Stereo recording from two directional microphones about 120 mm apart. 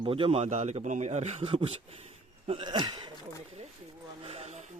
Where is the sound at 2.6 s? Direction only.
40° right (ahead or behind).